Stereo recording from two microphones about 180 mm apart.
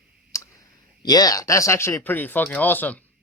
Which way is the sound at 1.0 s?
20° left (ahead or behind).